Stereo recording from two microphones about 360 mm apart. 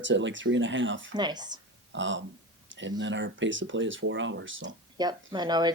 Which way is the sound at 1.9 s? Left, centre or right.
Right.